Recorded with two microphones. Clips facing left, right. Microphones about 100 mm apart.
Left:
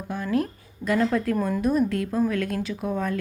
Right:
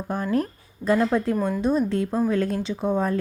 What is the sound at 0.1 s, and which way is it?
Speech, 40° right (ahead or behind).